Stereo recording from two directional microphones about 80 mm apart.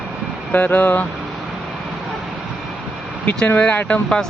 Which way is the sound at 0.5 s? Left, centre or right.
Centre.